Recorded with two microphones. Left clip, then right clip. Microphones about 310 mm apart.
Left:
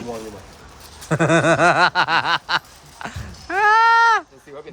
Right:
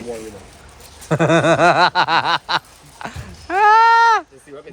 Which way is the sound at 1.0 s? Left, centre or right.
Centre.